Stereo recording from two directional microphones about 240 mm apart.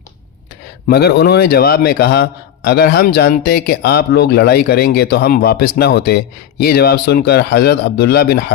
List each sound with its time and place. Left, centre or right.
0.9 s speech: left